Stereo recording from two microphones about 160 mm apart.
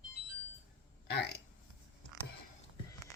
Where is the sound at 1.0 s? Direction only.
90° left.